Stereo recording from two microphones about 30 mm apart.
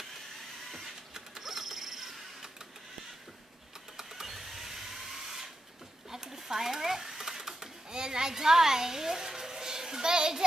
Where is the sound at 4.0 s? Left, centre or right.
Centre.